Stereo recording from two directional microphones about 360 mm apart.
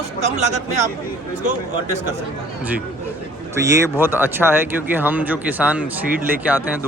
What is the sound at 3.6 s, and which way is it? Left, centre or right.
Speech, centre.